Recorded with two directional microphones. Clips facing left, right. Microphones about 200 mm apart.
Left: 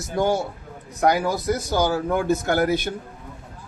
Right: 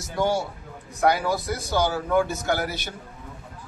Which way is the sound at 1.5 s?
45° left (ahead or behind).